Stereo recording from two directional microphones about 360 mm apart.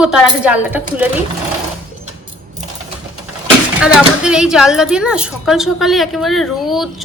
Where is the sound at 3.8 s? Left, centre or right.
Centre.